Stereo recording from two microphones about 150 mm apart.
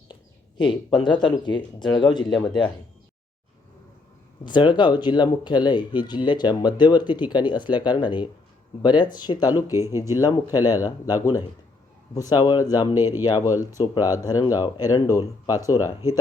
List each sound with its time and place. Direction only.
0.7 s speech: 30° left (ahead or behind)
4.4 s speech: 30° left (ahead or behind)
9.7 s speech: 15° right (ahead or behind)
10.0 s speech: 25° left (ahead or behind)
13.0 s speech: 15° right (ahead or behind)
13.2 s speech: 25° left (ahead or behind)